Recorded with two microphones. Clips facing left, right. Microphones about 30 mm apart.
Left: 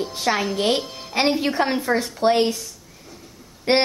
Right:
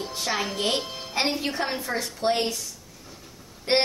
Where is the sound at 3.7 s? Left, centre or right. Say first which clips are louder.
Left 4 dB; left.